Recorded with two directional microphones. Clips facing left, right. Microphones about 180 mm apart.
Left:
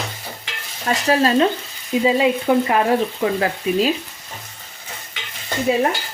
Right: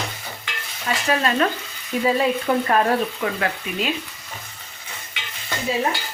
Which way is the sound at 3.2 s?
30° left (ahead or behind).